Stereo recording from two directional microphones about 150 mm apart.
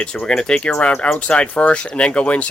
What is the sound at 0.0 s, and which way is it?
Speech, 5° left (ahead or behind).